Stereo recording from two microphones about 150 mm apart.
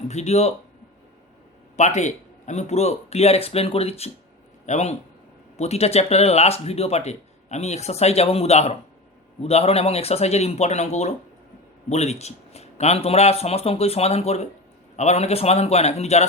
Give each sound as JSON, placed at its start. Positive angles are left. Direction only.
{"t": 0.1, "sound": "speech", "side_deg": 50}
{"t": 1.7, "sound": "speech", "side_deg": 50}